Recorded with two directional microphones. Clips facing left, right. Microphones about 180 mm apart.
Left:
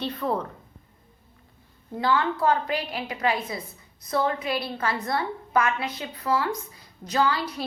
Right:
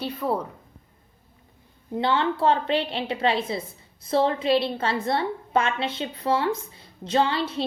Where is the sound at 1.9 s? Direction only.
25° right (ahead or behind).